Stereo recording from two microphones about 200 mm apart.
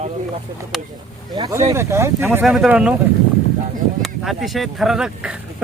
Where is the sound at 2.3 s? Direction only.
5° right (ahead or behind).